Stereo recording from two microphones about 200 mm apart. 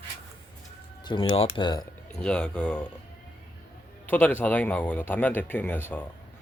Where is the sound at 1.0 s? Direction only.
25° left (ahead or behind).